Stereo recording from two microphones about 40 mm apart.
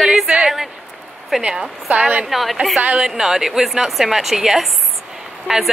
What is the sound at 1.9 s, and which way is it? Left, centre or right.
Speech, right.